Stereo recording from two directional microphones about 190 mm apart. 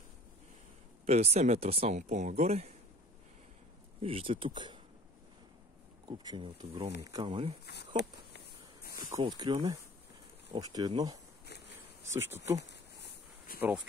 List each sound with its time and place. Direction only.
1.0 s speech: 35° right (ahead or behind)
4.0 s speech: 30° right (ahead or behind)
6.0 s speech: 25° right (ahead or behind)
7.6 s speech: 60° left (ahead or behind)
9.2 s speech: 20° right (ahead or behind)
11.4 s a sound: 60° left (ahead or behind)
13.6 s speech: 10° right (ahead or behind)